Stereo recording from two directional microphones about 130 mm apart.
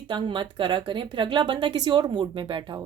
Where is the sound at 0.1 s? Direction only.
35° right (ahead or behind).